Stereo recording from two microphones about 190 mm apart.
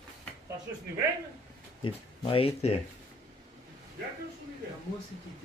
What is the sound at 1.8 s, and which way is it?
Speech, 30° left (ahead or behind).